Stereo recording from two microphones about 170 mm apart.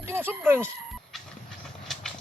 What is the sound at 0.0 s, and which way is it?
Speech, 15° right (ahead or behind).